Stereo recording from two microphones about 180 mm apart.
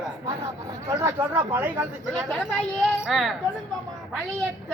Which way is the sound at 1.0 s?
15° right (ahead or behind).